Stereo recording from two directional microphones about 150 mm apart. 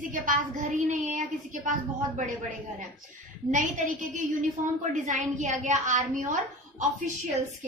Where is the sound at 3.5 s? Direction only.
55° right (ahead or behind).